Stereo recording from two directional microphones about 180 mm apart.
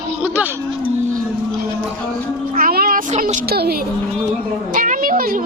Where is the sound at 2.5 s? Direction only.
55° right (ahead or behind).